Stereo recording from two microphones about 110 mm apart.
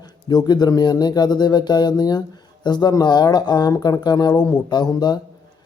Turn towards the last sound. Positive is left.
turn(degrees=40)  # may be behind; listen again after turning